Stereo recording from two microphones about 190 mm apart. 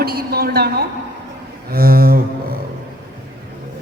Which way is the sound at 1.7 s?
55° right (ahead or behind).